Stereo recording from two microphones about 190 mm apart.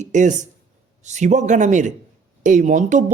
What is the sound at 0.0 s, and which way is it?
Speech, 40° right (ahead or behind).